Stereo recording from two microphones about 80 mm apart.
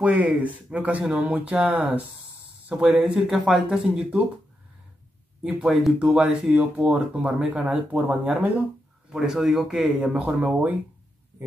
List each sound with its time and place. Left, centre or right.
0.0 s speech: centre
5.4 s speech: centre
9.1 s speech: centre
10.2 s speech: right